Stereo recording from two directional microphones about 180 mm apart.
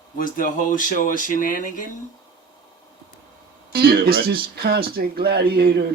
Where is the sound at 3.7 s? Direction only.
60° right (ahead or behind).